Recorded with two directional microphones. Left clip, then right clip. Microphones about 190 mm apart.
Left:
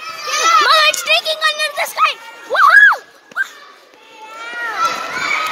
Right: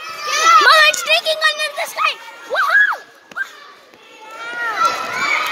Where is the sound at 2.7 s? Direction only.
20° left (ahead or behind).